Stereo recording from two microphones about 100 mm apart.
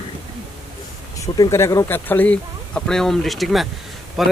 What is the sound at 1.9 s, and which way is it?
Speech, 20° left (ahead or behind).